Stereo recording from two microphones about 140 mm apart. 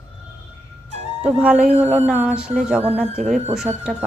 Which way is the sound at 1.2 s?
5° right (ahead or behind).